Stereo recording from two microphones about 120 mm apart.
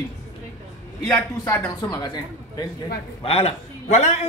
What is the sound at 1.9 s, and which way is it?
Speech, 35° left (ahead or behind).